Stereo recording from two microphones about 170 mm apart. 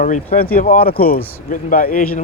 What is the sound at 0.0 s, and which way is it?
A man's voice, 55° left (ahead or behind).